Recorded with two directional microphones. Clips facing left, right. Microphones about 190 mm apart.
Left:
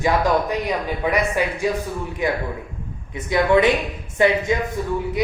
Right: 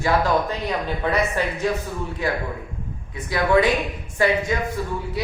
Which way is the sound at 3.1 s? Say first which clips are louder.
Left 2 dB; 20° left (ahead or behind).